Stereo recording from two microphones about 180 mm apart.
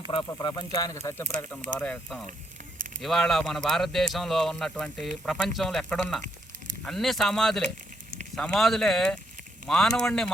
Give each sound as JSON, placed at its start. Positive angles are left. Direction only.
{"t": 0.3, "sound": "speech", "side_deg": 25}